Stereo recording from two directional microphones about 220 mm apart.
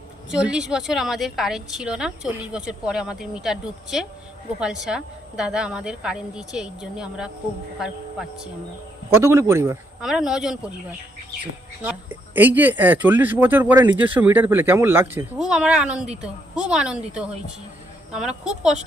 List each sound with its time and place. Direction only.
0.3 s a woman's voice: 5° right (ahead or behind)
9.0 s a woman's voice: 10° right (ahead or behind)
11.8 s a woman's voice: 10° right (ahead or behind)